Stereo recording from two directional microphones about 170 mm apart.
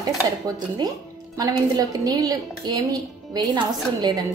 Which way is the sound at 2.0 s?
20° right (ahead or behind).